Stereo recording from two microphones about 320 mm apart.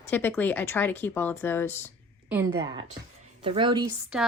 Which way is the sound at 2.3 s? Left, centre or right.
Centre.